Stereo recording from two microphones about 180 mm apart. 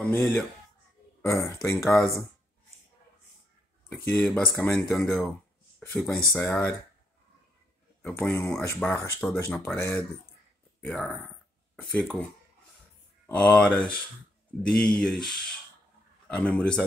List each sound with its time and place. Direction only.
0.0 s speech: 5° left (ahead or behind)
1.2 s speech: 15° left (ahead or behind)
1.8 s speech: centre (ahead or behind)
3.9 s speech: 5° left (ahead or behind)
8.0 s speech: 5° left (ahead or behind)
13.3 s speech: 5° left (ahead or behind)